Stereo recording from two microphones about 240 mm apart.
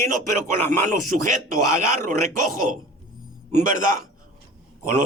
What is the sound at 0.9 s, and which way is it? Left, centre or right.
Speech, right.